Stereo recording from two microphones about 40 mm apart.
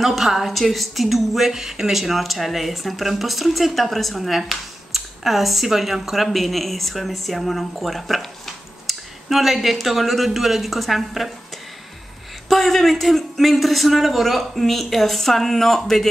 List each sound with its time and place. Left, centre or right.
0.0 s a woman's voice: centre
12.4 s a woman's voice: centre